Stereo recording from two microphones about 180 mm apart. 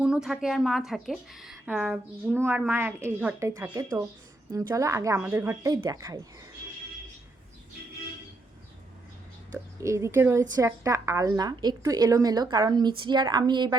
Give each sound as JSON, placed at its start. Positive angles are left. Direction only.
{"t": 0.0, "sound": "a woman's voice", "side_deg": -5}
{"t": 9.8, "sound": "a woman's voice", "side_deg": -15}